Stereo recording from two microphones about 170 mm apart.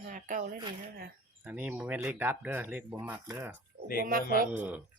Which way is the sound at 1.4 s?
10° right (ahead or behind).